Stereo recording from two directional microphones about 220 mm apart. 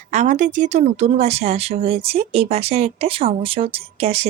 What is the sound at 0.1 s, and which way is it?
A woman's voice, 30° right (ahead or behind).